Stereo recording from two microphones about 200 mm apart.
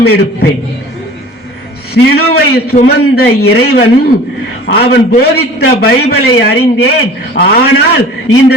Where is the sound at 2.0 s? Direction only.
55° left (ahead or behind).